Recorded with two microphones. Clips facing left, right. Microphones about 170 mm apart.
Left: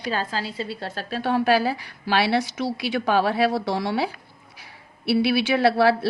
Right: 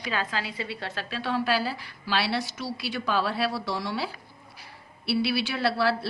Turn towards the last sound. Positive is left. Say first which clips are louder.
# left 7 dB
turn(degrees=60)  # may be behind; listen again after turning